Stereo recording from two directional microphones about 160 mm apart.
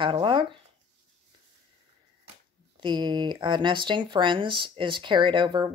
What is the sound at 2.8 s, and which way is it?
Speech, 30° right (ahead or behind).